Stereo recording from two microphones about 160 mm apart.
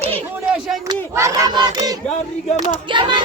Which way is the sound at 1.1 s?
20° right (ahead or behind).